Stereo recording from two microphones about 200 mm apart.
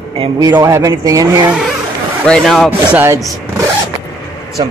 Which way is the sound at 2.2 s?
Centre (ahead or behind).